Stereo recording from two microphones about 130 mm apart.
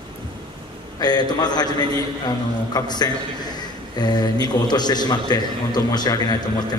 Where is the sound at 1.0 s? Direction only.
30° left (ahead or behind).